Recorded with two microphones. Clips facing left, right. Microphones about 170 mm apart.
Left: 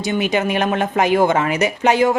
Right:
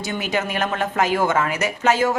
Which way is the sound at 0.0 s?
20° left (ahead or behind).